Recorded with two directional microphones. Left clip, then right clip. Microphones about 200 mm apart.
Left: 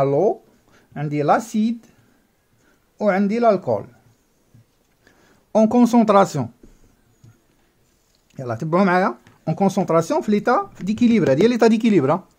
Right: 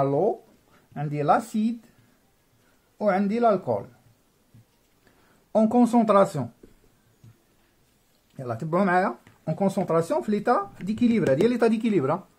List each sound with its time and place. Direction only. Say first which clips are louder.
0.0 s speech: left 5 dB; 45° left (ahead or behind)
3.0 s speech: left 4 dB; 45° left (ahead or behind)
5.5 s speech: left 5 dB; 45° left (ahead or behind)
8.4 s speech: left 6 dB; 45° left (ahead or behind)